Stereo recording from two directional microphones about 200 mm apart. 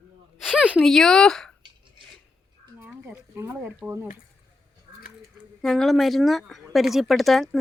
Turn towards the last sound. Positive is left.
turn(degrees=0)  # may be behind; listen again after turning